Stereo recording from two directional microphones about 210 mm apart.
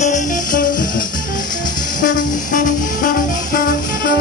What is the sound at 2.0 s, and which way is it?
Music, 40° left (ahead or behind).